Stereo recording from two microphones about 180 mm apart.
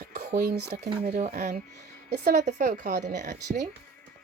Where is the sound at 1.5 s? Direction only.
40° right (ahead or behind).